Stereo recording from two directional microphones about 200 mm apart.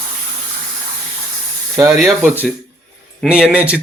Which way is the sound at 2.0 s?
10° right (ahead or behind).